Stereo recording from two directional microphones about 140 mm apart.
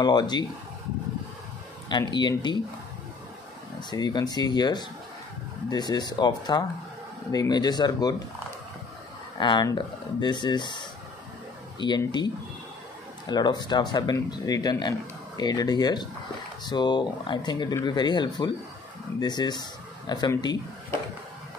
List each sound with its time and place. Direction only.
0.0 s speech: 30° left (ahead or behind)
1.9 s speech: 30° left (ahead or behind)
3.9 s speech: 30° left (ahead or behind)
9.4 s speech: 35° left (ahead or behind)
13.3 s speech: 30° left (ahead or behind)